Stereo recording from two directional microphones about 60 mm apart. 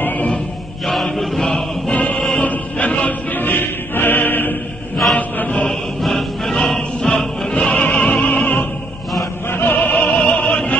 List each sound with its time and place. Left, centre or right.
0.0 s a sound: left
0.8 s chant: centre
1.9 s music: centre
2.5 s choir: left
5.1 s chant: left
5.7 s music: centre